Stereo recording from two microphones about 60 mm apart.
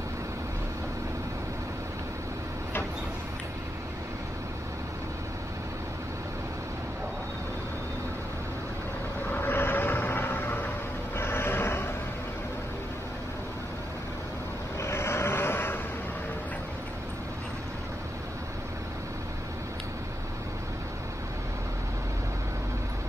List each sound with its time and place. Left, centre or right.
9.3 s vehicle: left
11.1 s a sound: left
14.8 s vehicle: left